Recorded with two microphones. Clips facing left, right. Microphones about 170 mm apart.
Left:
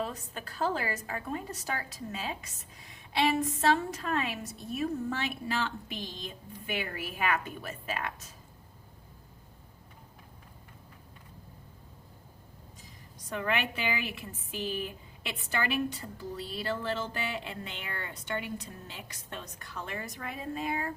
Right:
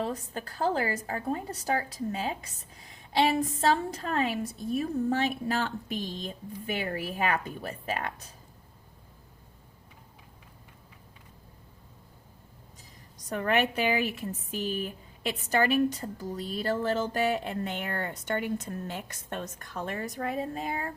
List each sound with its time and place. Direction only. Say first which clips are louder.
0.0 s a woman's voice: right 4 dB; 35° right (ahead or behind)
13.3 s speech: right 5 dB; 40° right (ahead or behind)